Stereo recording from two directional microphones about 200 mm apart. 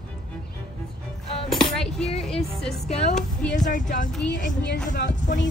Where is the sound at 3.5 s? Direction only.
40° left (ahead or behind).